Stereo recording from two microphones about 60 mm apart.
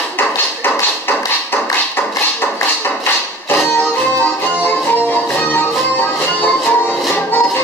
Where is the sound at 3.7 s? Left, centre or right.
Left.